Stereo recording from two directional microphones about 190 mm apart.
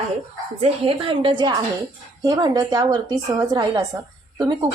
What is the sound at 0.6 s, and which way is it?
A woman's voice, 30° right (ahead or behind).